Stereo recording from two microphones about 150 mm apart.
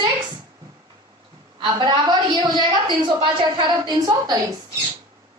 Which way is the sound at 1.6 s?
30° right (ahead or behind).